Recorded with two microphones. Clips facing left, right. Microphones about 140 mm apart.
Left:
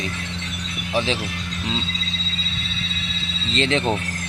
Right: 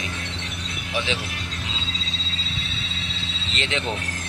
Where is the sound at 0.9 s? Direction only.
35° left (ahead or behind).